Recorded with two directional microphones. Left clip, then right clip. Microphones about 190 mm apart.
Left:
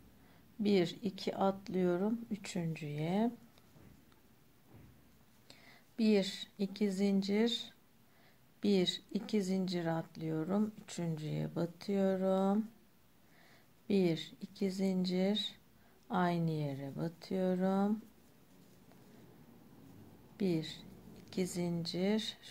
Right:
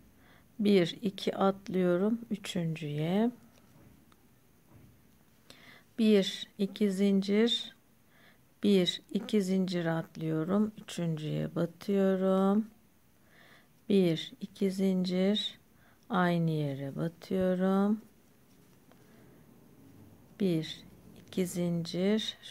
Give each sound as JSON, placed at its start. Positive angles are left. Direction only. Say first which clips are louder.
{"t": 0.6, "sound": "speech", "louder": "right 5 dB", "side_deg": -35}
{"t": 5.5, "sound": "a woman's voice", "louder": "right 5 dB", "side_deg": -35}
{"t": 20.3, "sound": "speech", "louder": "right 4 dB", "side_deg": -30}